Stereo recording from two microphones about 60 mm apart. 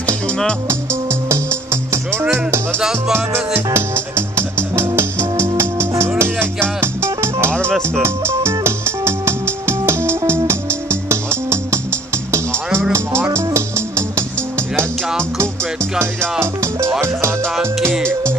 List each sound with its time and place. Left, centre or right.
1.3 s music: right
13.3 s music: right
15.3 s music: right